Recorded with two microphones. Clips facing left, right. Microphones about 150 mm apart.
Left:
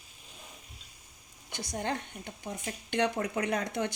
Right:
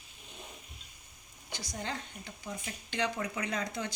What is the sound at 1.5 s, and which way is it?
A woman's voice, 55° left (ahead or behind).